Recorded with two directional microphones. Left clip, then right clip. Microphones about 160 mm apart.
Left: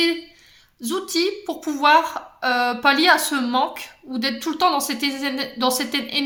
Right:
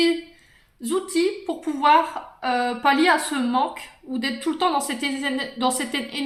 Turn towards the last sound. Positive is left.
turn(degrees=45)  # may be behind; listen again after turning